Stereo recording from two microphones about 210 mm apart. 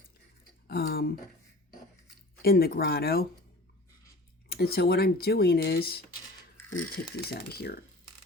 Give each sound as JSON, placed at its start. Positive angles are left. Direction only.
{"t": 0.7, "sound": "speech", "side_deg": 45}
{"t": 2.4, "sound": "speech", "side_deg": 45}
{"t": 4.4, "sound": "speech", "side_deg": 45}